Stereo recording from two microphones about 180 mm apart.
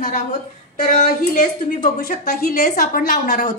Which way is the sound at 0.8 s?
45° left (ahead or behind).